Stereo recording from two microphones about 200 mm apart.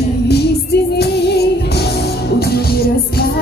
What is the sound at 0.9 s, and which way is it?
Music, 55° left (ahead or behind).